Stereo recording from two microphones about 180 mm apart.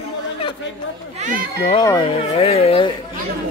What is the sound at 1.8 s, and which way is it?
Speech, 20° left (ahead or behind).